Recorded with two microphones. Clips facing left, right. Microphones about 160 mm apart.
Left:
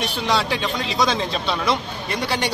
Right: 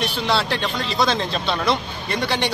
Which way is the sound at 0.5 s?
10° left (ahead or behind).